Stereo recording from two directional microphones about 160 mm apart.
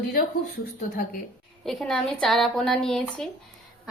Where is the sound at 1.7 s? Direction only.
5° left (ahead or behind).